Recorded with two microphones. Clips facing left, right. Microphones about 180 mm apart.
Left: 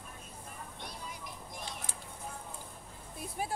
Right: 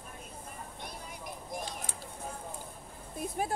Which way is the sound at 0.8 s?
50° right (ahead or behind).